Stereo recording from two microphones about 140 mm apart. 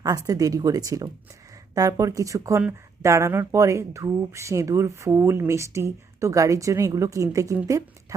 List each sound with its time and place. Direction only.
0.0 s speech: 25° right (ahead or behind)